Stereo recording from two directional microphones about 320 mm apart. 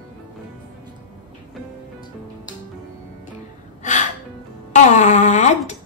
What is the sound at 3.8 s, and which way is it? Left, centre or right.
Music, left.